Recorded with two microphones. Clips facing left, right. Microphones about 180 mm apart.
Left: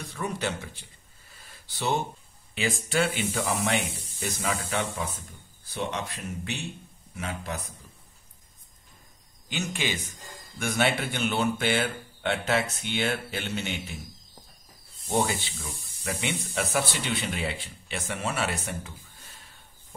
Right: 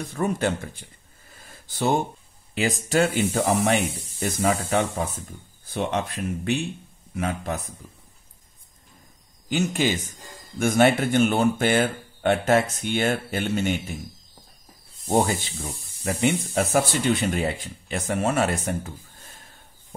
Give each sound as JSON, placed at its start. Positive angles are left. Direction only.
{"t": 0.0, "sound": "speech", "side_deg": -45}
{"t": 1.3, "sound": "a sound", "side_deg": -50}
{"t": 2.5, "sound": "speech", "side_deg": -40}
{"t": 9.5, "sound": "speech", "side_deg": -45}
{"t": 15.0, "sound": "speech", "side_deg": -45}